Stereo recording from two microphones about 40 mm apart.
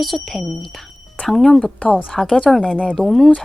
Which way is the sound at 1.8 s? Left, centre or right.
Left.